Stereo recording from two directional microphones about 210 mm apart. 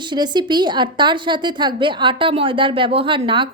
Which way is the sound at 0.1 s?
20° right (ahead or behind).